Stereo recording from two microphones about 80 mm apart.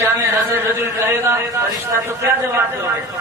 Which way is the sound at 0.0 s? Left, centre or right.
Right.